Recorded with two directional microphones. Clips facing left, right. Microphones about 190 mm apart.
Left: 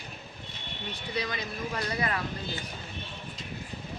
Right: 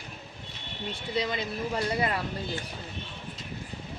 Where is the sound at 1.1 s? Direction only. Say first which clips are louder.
Right 4 dB; 25° right (ahead or behind).